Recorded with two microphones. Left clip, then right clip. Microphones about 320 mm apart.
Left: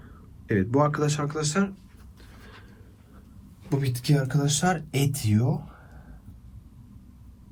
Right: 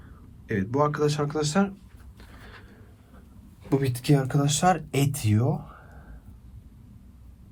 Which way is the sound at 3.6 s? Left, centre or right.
Right.